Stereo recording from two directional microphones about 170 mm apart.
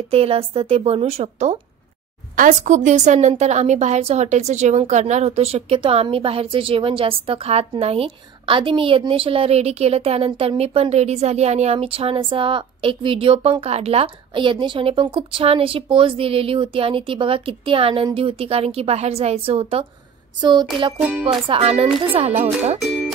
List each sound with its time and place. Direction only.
0.1 s a woman's voice: 35° right (ahead or behind)
2.3 s a woman's voice: 50° right (ahead or behind)
20.3 s a sound: 25° right (ahead or behind)
21.2 s a woman's voice: 30° right (ahead or behind)
22.8 s music: centre (ahead or behind)